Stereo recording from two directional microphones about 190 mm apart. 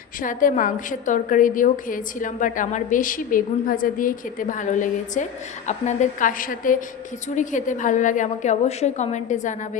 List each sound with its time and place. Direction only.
0.2 s a woman's voice: 45° left (ahead or behind)